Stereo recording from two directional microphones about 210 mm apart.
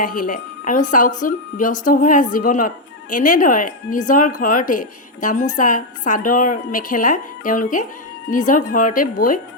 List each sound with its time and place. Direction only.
0.2 s a woman's voice: 40° left (ahead or behind)